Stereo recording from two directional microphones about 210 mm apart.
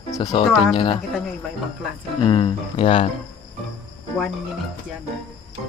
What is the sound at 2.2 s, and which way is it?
Speech, 20° left (ahead or behind).